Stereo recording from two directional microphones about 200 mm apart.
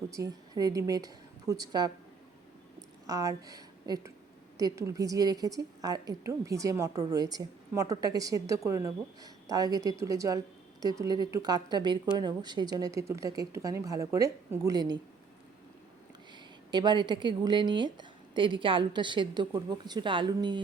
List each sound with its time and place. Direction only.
0.1 s speech: 15° right (ahead or behind)
3.1 s a woman's voice: 15° right (ahead or behind)
16.7 s a woman's voice: 20° right (ahead or behind)